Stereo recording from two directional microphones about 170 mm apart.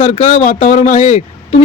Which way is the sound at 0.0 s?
35° left (ahead or behind).